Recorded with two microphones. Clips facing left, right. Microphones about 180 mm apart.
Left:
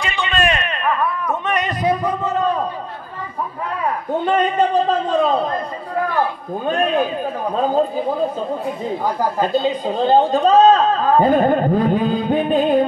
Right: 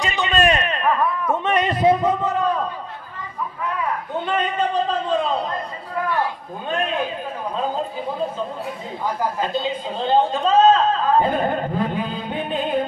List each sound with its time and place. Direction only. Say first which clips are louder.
0.0 s a sound: right 1 dB; 40° right (ahead or behind); by 2.1 s 25° right (ahead or behind)
4.3 s a man's voice: left 5 dB; 45° left (ahead or behind)
6.6 s a man's voice: left 5 dB; 45° left (ahead or behind)
9.4 s a man's voice: left 6 dB; 40° left (ahead or behind)